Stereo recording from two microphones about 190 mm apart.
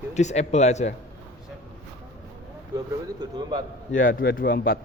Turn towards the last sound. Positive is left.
turn(degrees=50)  # may be behind; listen again after turning